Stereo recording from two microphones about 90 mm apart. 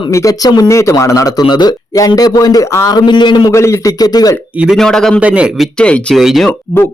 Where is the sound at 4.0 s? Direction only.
45° left (ahead or behind).